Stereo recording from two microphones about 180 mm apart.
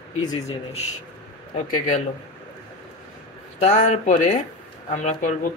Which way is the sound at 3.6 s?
45° left (ahead or behind).